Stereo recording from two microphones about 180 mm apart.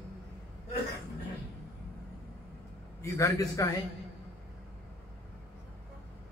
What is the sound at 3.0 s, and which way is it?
Speech, 15° left (ahead or behind).